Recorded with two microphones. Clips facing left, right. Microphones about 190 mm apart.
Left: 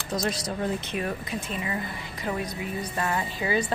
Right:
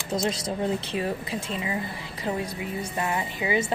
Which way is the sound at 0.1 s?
25° right (ahead or behind).